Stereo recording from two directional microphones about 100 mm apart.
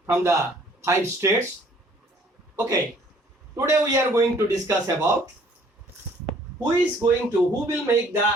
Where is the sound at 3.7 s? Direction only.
30° right (ahead or behind).